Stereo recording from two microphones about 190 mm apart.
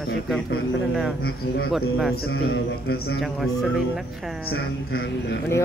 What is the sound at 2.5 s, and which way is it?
Mantra, 55° left (ahead or behind).